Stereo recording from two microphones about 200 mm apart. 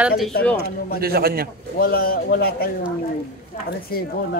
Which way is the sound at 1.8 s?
50° left (ahead or behind).